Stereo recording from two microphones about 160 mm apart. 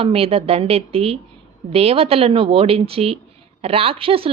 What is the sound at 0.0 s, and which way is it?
Speech, 35° right (ahead or behind).